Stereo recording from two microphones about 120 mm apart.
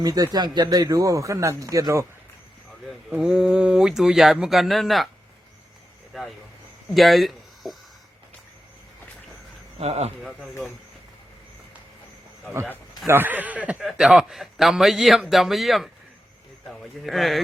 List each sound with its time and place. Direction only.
0.0 s speech: 30° right (ahead or behind)
3.1 s a man's voice: 5° right (ahead or behind)
6.1 s vehicle: centre (ahead or behind)
6.9 s speech: centre (ahead or behind)
9.7 s speech: 60° right (ahead or behind)
13.1 s a man's voice: 15° right (ahead or behind); by 15.9 s centre (ahead or behind)
17.0 s a man's voice: centre (ahead or behind)